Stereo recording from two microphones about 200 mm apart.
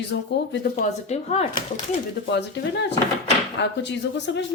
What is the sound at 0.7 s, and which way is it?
Speech, 35° left (ahead or behind).